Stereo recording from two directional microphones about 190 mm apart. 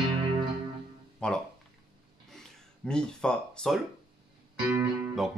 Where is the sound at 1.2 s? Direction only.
5° left (ahead or behind).